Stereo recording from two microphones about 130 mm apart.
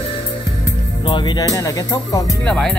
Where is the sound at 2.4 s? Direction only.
5° left (ahead or behind).